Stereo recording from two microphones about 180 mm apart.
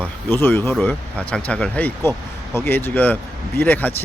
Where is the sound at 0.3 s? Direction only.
10° left (ahead or behind).